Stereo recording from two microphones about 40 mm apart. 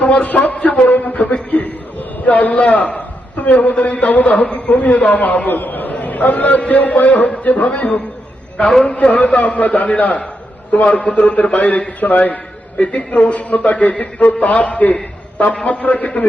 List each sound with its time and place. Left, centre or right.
0.0 s a man's voice: left